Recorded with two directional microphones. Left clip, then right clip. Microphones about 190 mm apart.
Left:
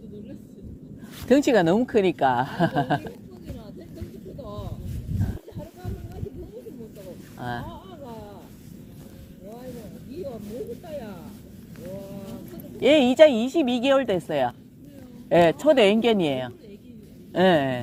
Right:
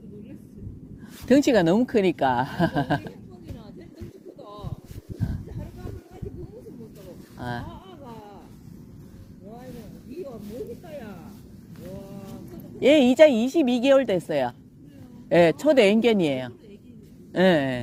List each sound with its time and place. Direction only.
1.3 s a woman's voice: 35° right (ahead or behind)
7.3 s a sound: 35° right (ahead or behind)
12.8 s a woman's voice: 35° right (ahead or behind)